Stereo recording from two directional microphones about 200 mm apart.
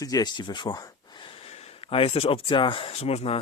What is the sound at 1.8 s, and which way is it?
Speech, 30° left (ahead or behind).